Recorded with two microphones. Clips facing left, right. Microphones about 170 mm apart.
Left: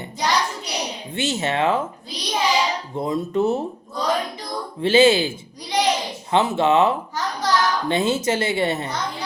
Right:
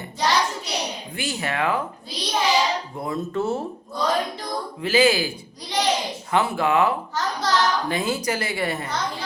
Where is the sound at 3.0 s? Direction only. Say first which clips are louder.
Left 6 dB; 20° left (ahead or behind).